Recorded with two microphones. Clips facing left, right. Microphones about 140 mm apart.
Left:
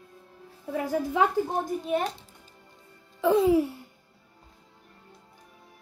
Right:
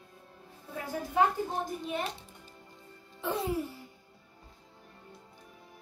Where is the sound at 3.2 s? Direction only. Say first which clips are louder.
Left 11 dB; 90° left.